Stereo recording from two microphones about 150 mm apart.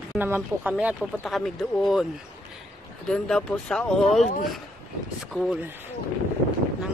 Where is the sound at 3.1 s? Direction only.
5° left (ahead or behind).